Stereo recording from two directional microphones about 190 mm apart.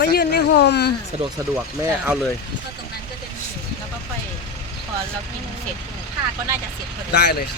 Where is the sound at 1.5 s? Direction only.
10° right (ahead or behind).